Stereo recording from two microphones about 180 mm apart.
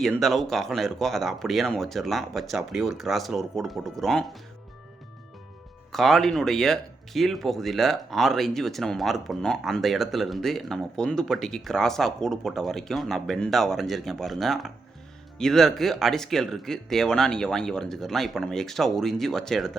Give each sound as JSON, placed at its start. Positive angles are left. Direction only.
{"t": 0.0, "sound": "speech", "side_deg": 0}
{"t": 5.9, "sound": "speech", "side_deg": 0}